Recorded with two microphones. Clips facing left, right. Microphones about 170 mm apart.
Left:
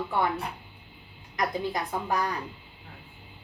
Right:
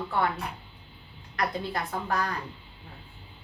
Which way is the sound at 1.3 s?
15° left (ahead or behind).